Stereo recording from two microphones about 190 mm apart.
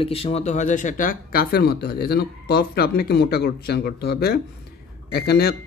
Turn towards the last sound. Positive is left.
turn(degrees=55)  # may be behind; listen again after turning